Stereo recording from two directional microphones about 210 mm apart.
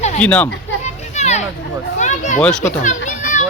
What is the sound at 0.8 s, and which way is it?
Children playing, 30° left (ahead or behind).